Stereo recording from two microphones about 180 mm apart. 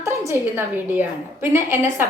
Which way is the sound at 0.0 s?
15° right (ahead or behind).